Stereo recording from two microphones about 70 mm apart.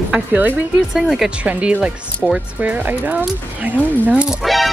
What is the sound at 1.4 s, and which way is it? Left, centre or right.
Speech, centre.